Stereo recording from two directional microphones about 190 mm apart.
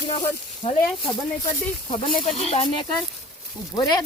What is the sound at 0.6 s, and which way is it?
Speech, 40° left (ahead or behind).